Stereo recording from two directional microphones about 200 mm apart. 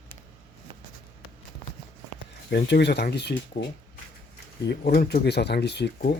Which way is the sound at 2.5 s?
55° left (ahead or behind).